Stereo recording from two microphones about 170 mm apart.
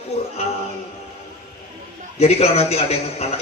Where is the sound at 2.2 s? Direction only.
35° left (ahead or behind).